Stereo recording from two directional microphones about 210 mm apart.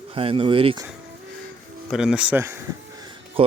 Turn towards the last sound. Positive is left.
turn(degrees=-25)  # may be behind; listen again after turning